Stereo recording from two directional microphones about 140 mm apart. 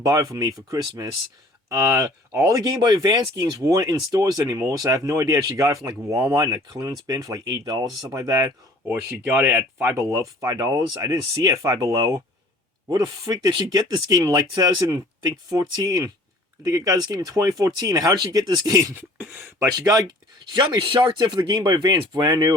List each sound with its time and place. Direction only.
0.0 s speech: 25° right (ahead or behind)
18.9 s a sound: 15° right (ahead or behind)
19.7 s speech: 30° right (ahead or behind)